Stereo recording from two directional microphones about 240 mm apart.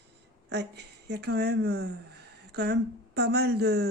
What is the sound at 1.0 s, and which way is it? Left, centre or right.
Speech, right.